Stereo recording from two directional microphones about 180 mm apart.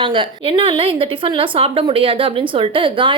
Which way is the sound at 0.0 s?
30° right (ahead or behind).